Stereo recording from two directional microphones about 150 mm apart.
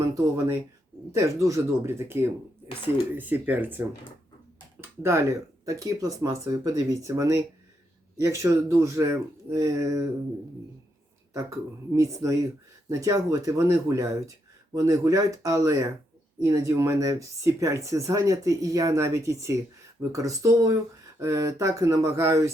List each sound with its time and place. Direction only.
0.1 s speech: 20° right (ahead or behind)
11.9 s speech: 20° right (ahead or behind)